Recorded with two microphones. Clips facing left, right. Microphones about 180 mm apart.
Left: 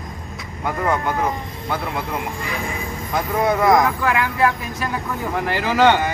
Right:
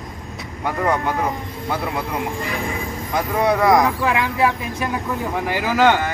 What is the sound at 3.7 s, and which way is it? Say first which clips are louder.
Speech: even; 15° right (ahead or behind).